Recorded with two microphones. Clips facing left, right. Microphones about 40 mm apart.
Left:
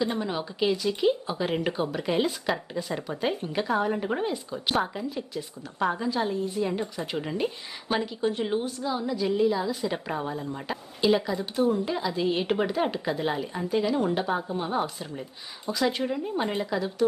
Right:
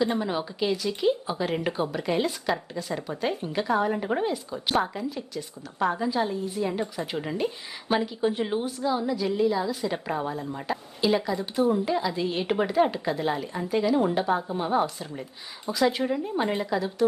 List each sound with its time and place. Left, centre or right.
0.0 s speech: centre